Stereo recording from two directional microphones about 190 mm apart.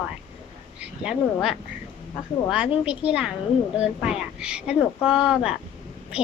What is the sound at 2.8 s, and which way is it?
Speech, 5° right (ahead or behind).